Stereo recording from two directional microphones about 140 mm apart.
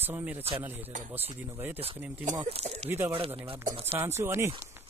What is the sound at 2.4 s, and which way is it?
Speech, 50° right (ahead or behind).